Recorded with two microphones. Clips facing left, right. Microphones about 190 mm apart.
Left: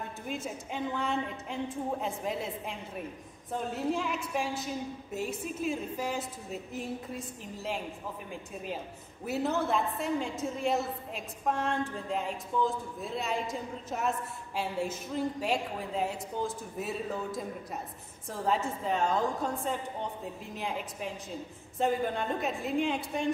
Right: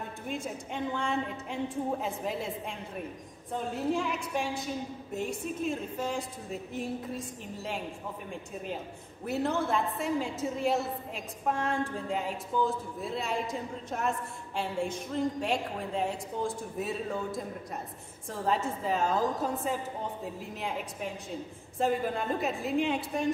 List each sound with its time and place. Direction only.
0.3 s a woman's voice: centre (ahead or behind)
3.7 s a woman's voice: centre (ahead or behind)
9.2 s a woman's voice: centre (ahead or behind)